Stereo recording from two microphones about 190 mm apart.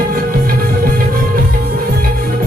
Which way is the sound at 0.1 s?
50° right (ahead or behind).